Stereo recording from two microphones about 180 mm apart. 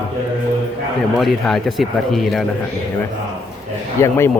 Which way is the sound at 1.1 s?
Centre (ahead or behind).